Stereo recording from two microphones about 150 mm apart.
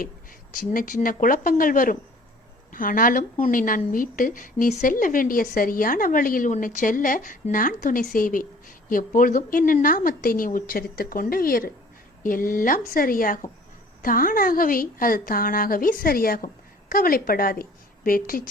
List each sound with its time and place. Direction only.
0.5 s a woman's voice: 65° left (ahead or behind)